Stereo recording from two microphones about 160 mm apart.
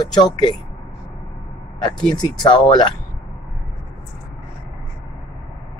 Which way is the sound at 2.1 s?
25° left (ahead or behind).